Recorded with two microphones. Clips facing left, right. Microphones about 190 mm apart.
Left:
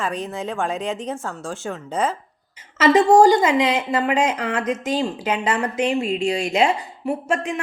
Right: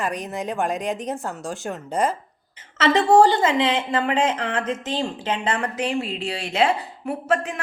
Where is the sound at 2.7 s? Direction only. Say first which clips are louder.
Left 2 dB; 10° left (ahead or behind).